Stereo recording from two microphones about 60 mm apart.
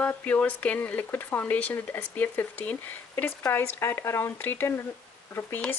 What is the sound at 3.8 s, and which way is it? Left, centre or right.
Speech, left.